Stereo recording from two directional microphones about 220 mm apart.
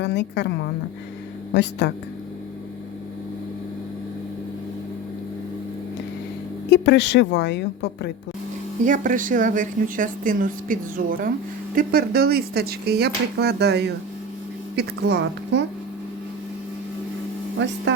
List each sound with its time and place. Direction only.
0.0 s a woman's voice: 50° left (ahead or behind)
6.7 s a woman's voice: 50° left (ahead or behind)
8.8 s speech: 35° right (ahead or behind)
17.6 s speech: 55° right (ahead or behind)